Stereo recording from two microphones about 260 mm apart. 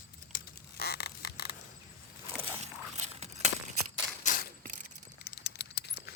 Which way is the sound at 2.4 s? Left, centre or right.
Right.